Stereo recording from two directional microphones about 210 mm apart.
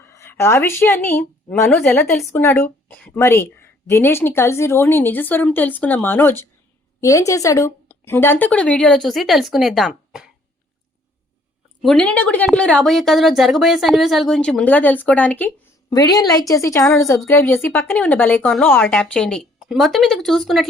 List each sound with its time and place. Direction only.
0.0 s a woman's voice: 10° left (ahead or behind)
11.8 s a woman's voice: 5° left (ahead or behind)
15.9 s a woman's voice: 20° left (ahead or behind); by 20.7 s centre (ahead or behind)